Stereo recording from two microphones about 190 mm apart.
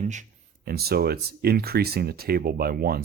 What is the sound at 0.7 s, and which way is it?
Speech, 55° right (ahead or behind).